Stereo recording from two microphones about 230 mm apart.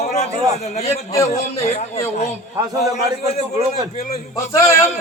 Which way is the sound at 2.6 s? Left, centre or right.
Centre.